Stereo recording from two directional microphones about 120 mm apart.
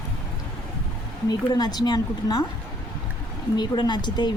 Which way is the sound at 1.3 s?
35° left (ahead or behind).